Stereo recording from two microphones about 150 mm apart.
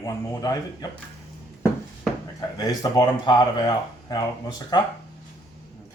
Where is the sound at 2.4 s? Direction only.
25° left (ahead or behind).